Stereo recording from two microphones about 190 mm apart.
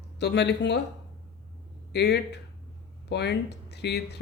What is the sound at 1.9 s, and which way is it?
Speech, 60° left (ahead or behind).